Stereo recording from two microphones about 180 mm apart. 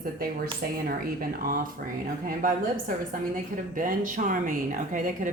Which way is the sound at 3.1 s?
50° right (ahead or behind).